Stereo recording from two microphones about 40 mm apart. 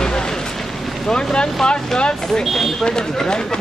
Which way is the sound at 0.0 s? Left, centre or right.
Centre.